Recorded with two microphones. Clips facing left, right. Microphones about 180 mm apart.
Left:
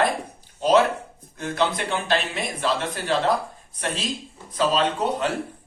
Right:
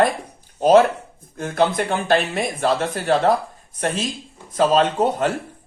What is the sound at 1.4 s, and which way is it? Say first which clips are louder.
Speech: right 5 dB; 50° right (ahead or behind).